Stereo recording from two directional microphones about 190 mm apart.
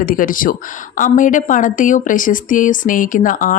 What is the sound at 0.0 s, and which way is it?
A woman's voice, 45° left (ahead or behind).